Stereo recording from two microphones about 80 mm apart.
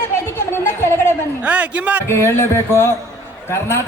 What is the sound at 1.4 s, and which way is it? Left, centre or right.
Speech, centre.